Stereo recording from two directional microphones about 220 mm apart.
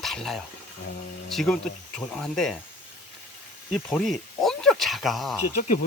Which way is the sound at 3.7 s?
Centre (ahead or behind).